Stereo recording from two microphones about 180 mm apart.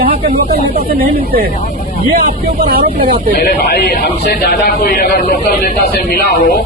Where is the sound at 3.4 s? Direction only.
60° left (ahead or behind).